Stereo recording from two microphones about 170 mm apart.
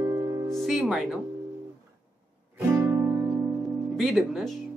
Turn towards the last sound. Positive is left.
turn(degrees=0)  # may be behind; listen again after turning